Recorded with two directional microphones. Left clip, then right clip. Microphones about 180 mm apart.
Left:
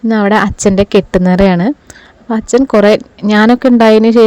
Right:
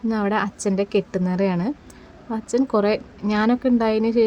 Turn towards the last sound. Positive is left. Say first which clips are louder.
# left 13 dB
turn(degrees=50)  # may be behind; listen again after turning